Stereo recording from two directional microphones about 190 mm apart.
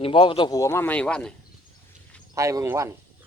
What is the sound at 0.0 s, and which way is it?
Speech, 25° left (ahead or behind).